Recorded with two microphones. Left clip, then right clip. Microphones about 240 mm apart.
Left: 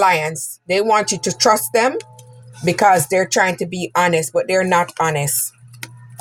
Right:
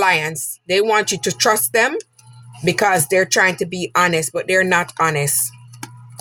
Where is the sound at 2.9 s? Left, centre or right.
Right.